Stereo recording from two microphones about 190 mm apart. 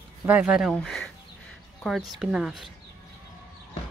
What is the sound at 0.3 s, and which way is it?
Speech, 5° right (ahead or behind).